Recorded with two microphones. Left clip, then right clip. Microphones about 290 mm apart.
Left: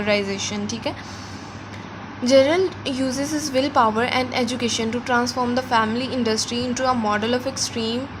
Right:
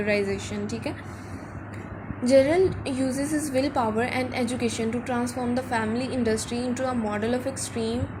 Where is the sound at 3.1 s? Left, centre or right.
Centre.